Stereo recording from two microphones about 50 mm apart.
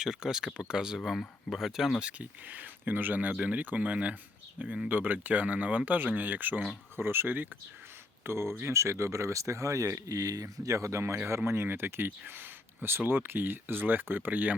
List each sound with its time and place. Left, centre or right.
0.0 s speech: centre
0.9 s speech: centre
2.0 s speech: right
6.9 s speech: right
8.2 s speech: right
8.6 s speech: right
11.4 s speech: right